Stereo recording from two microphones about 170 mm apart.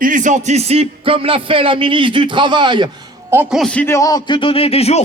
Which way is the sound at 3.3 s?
5° right (ahead or behind).